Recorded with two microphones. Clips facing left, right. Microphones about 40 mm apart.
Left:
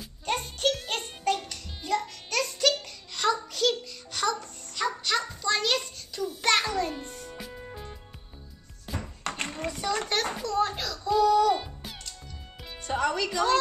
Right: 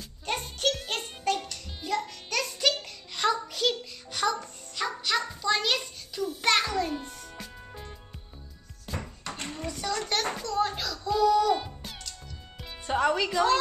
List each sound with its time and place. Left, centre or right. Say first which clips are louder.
0.2 s music: left 1 dB; centre
3.2 s a sound: left 1 dB; centre
4.8 s dog: left 1 dB; centre
6.2 s music: even; centre
9.3 s a sound: left 3 dB; left
9.7 s children playing: left 1 dB; centre
10.3 s music: left 1 dB; centre
12.8 s music: right 2 dB; centre